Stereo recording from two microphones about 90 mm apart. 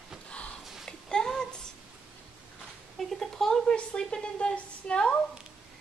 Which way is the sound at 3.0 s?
Centre (ahead or behind).